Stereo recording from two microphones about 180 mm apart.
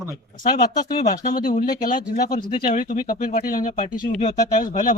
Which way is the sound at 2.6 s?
45° left (ahead or behind).